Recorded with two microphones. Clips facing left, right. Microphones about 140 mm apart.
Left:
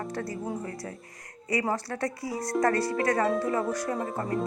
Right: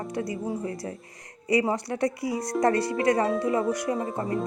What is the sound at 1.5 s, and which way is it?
Speech, 20° right (ahead or behind).